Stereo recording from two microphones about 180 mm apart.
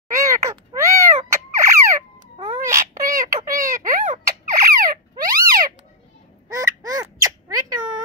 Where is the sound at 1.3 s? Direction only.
15° right (ahead or behind).